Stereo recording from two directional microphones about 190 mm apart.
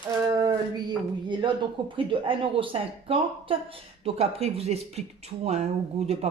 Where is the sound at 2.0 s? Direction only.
25° right (ahead or behind).